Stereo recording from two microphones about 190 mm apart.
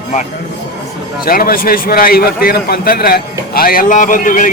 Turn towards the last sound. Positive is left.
turn(degrees=45)  # may be behind; listen again after turning